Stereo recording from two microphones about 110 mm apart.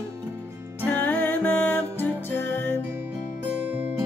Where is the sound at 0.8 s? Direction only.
15° left (ahead or behind).